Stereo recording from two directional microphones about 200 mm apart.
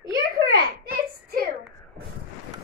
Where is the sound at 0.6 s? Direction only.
45° right (ahead or behind).